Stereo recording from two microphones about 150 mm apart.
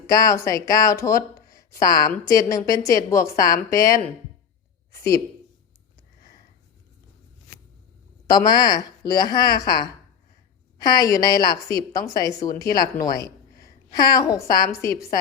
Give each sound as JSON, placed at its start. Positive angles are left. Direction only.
{"t": 0.1, "sound": "a woman's voice", "side_deg": 25}
{"t": 4.9, "sound": "a sound", "side_deg": 20}
{"t": 8.3, "sound": "a woman's voice", "side_deg": 25}